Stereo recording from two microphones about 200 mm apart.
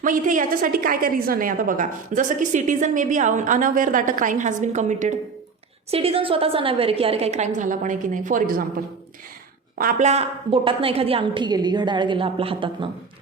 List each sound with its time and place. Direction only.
0.0 s a woman's voice: 40° right (ahead or behind)
9.7 s a woman's voice: 40° right (ahead or behind)